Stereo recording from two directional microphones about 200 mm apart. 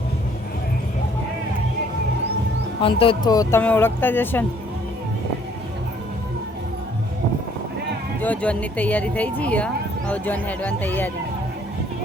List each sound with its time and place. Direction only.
2.8 s speech: 25° left (ahead or behind); by 4.4 s 10° left (ahead or behind)
8.2 s speech: 5° left (ahead or behind)